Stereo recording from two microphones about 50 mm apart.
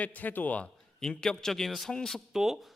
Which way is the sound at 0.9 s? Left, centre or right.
Centre.